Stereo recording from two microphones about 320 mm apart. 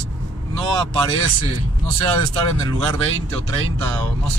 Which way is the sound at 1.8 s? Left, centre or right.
Right.